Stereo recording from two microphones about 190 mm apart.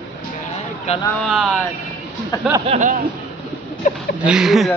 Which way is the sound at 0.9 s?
35° left (ahead or behind).